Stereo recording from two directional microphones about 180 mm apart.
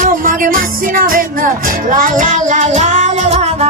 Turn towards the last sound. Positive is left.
turn(degrees=-40)  # may be behind; listen again after turning